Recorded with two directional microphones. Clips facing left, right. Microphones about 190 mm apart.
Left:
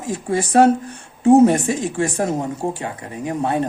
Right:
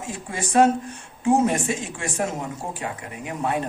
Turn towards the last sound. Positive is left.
turn(degrees=30)  # may be behind; listen again after turning